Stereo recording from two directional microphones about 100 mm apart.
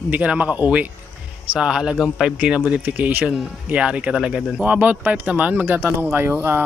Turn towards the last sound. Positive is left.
turn(degrees=-20)  # may be behind; listen again after turning